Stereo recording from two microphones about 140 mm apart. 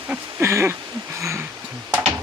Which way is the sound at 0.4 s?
20° right (ahead or behind).